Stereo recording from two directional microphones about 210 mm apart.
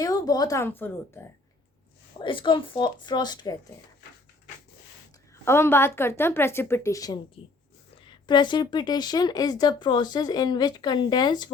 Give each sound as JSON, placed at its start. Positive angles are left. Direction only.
{"t": 0.0, "sound": "a woman's voice", "side_deg": 15}
{"t": 2.1, "sound": "speech", "side_deg": 25}
{"t": 5.5, "sound": "a woman's voice", "side_deg": 10}